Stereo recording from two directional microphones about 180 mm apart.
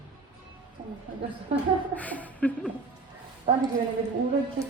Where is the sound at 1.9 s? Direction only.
10° left (ahead or behind).